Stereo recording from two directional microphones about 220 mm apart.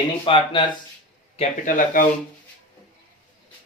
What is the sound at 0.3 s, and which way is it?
Speech, 20° left (ahead or behind).